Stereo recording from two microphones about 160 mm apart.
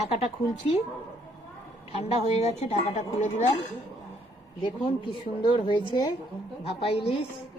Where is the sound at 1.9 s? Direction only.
40° left (ahead or behind).